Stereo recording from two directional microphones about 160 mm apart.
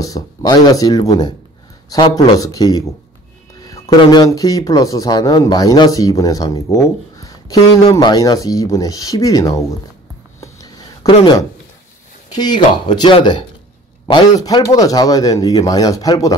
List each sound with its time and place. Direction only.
0.0 s speech: 25° left (ahead or behind)
3.6 s music: 25° left (ahead or behind)
4.0 s speech: 25° left (ahead or behind)
10.4 s a sound: 25° left (ahead or behind)
12.3 s speech: 25° left (ahead or behind)